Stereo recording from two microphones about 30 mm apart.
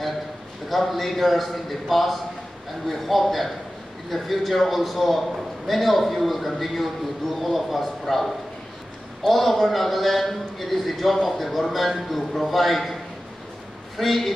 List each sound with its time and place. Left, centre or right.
0.7 s a man's voice: centre
13.9 s a man's voice: centre